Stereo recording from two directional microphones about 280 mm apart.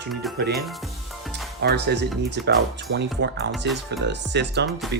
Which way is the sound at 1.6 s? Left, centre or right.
Right.